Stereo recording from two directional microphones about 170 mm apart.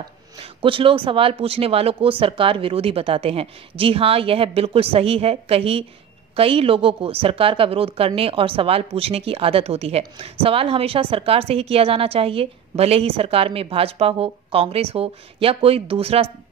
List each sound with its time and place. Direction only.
0.4 s a woman's voice: 30° right (ahead or behind)